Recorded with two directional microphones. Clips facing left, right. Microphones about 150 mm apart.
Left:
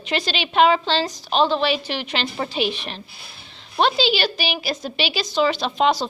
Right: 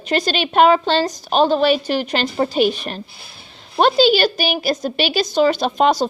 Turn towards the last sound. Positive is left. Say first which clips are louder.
# right 4 dB
turn(degrees=-45)  # may be behind; listen again after turning